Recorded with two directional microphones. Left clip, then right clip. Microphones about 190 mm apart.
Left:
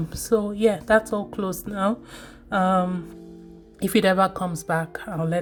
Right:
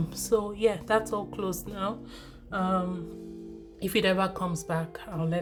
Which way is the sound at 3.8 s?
30° left (ahead or behind).